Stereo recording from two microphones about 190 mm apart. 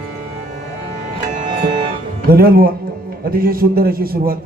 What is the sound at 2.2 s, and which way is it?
A man's voice, 50° right (ahead or behind).